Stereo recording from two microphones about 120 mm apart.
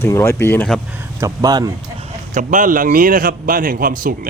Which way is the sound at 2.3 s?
90° right.